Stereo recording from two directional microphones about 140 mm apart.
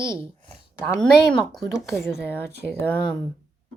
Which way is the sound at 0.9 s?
5° left (ahead or behind).